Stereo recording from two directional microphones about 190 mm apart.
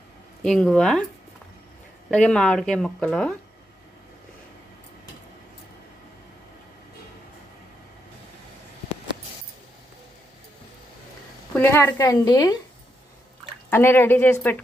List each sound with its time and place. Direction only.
0.4 s speech: 5° left (ahead or behind)
2.0 s speech: 5° left (ahead or behind)
11.5 s speech: 10° left (ahead or behind)
13.7 s speech: 10° left (ahead or behind)